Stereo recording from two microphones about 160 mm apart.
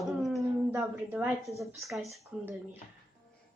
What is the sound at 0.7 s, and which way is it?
A woman's voice, 10° right (ahead or behind).